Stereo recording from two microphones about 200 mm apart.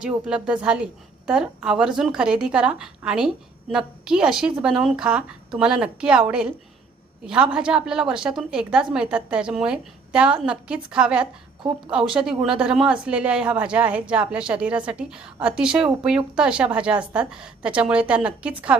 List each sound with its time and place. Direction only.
0.0 s speech: 5° right (ahead or behind)
7.3 s speech: 5° right (ahead or behind)